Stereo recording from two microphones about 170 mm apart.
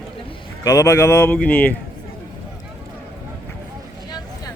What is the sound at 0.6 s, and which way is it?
Speech, 20° left (ahead or behind).